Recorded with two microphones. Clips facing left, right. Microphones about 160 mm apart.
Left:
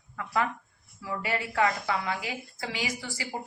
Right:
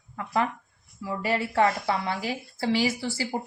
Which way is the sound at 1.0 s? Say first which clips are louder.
Right 4 dB; 30° right (ahead or behind).